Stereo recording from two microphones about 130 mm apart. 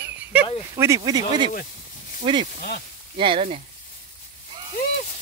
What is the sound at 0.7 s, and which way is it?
Speech, 25° right (ahead or behind).